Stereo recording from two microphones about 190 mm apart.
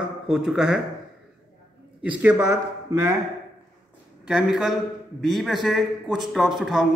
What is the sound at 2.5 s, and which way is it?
Speech, 15° right (ahead or behind).